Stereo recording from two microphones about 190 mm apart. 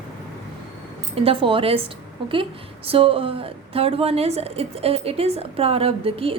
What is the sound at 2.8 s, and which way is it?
A woman's voice, 30° right (ahead or behind).